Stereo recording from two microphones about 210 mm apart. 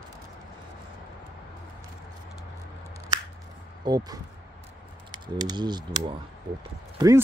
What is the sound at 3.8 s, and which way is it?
Speech, 20° right (ahead or behind).